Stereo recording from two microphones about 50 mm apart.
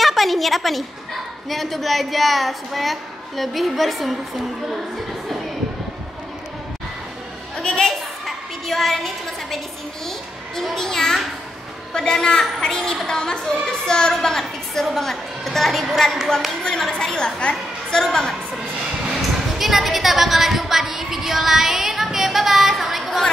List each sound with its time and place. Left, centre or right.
0.0 s a woman's voice: centre
7.5 s a sound: centre
8.6 s a woman's voice: centre
19.6 s speech: centre